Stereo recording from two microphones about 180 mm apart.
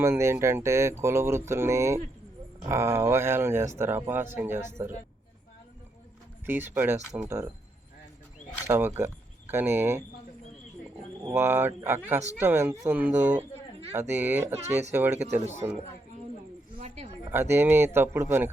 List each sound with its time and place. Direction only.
0.0 s speech: 15° right (ahead or behind)
6.4 s speech: 10° right (ahead or behind)
8.6 s speech: 15° right (ahead or behind)
11.2 s speech: 15° right (ahead or behind)
13.3 s a sound: 35° right (ahead or behind)
14.2 s speech: 10° right (ahead or behind)
14.5 s speech: 40° right (ahead or behind)
15.6 s a man's voice: 25° right (ahead or behind)
16.7 s a sound: 35° right (ahead or behind)
17.3 s speech: 15° right (ahead or behind)